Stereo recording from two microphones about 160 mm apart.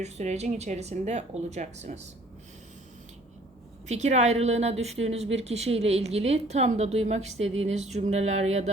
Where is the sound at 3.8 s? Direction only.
45° right (ahead or behind).